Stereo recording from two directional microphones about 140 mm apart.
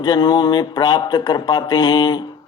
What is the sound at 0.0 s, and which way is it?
Speech, 30° left (ahead or behind).